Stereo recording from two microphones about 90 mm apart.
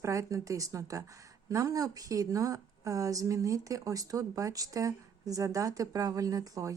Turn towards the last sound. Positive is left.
turn(degrees=-40)  # may be behind; listen again after turning